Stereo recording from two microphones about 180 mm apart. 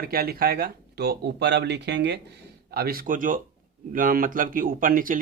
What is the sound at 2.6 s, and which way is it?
A man's voice, 55° right (ahead or behind).